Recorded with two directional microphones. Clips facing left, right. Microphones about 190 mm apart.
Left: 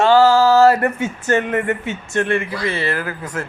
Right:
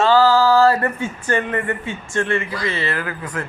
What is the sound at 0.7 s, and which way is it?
Speech, 75° left (ahead or behind).